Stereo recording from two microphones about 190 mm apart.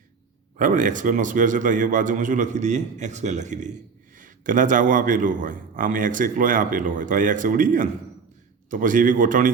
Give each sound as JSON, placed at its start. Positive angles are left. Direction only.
{"t": 0.6, "sound": "a man's voice", "side_deg": -45}